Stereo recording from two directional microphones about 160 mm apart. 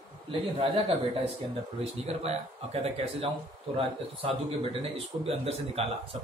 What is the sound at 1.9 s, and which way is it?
Speech, 40° right (ahead or behind).